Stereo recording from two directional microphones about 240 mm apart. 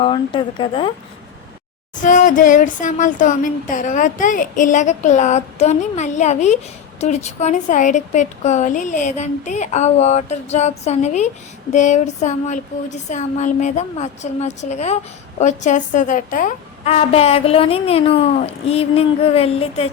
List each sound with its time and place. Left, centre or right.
0.0 s a woman's voice: centre
2.0 s a woman's voice: left